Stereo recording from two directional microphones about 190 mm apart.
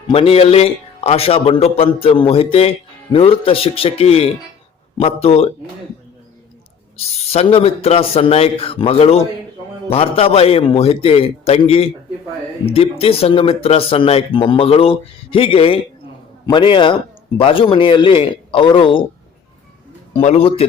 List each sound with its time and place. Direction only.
0.1 s a man's voice: 30° left (ahead or behind)
7.2 s a man's voice: 30° left (ahead or behind)
20.1 s a man's voice: 35° left (ahead or behind)